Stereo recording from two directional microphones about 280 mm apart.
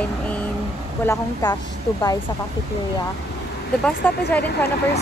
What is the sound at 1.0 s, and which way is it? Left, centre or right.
Speech, centre.